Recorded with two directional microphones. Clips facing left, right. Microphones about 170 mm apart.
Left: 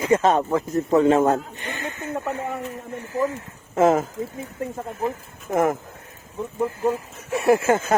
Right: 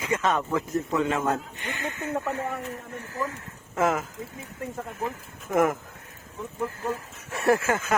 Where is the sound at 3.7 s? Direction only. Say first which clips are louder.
Left 7 dB; 30° left (ahead or behind).